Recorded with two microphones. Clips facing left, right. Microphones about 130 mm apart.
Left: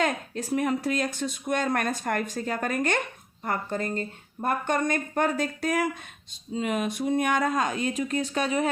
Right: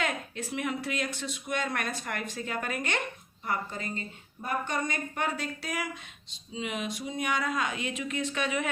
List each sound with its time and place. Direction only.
0.0 s speech: 40° left (ahead or behind)